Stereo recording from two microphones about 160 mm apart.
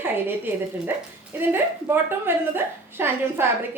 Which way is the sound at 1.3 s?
10° right (ahead or behind).